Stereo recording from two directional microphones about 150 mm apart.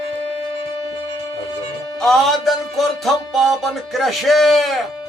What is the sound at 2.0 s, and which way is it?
Music, centre (ahead or behind).